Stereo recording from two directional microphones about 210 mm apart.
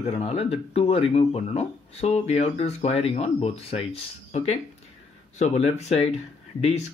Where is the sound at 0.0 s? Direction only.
30° left (ahead or behind).